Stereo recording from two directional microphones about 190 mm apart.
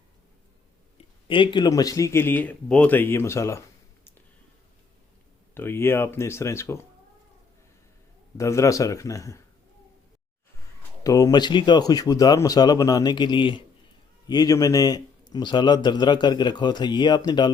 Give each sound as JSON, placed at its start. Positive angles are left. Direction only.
{"t": 0.9, "sound": "speech", "side_deg": 25}
{"t": 5.5, "sound": "speech", "side_deg": 10}
{"t": 8.4, "sound": "speech", "side_deg": 15}
{"t": 11.0, "sound": "speech", "side_deg": 20}